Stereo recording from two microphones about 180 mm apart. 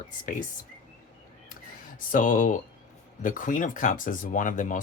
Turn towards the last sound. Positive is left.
turn(degrees=45)  # may be behind; listen again after turning